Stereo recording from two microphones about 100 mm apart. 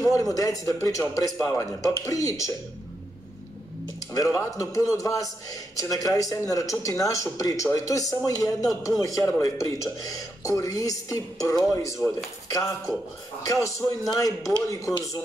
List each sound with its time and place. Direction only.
0.0 s a man's voice: 30° left (ahead or behind)
4.1 s a man's voice: 35° left (ahead or behind)